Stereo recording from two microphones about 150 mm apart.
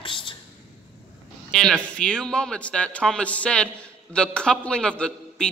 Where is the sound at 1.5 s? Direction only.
5° left (ahead or behind).